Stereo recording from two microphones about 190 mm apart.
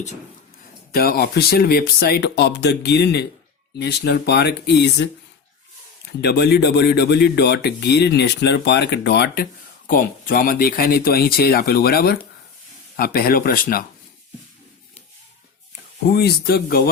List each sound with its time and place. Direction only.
0.9 s speech: 50° left (ahead or behind)
6.2 s speech: 60° left (ahead or behind)
16.0 s speech: 55° left (ahead or behind)